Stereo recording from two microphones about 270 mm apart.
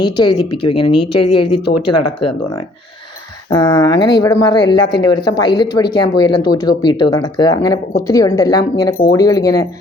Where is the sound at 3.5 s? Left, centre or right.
Centre.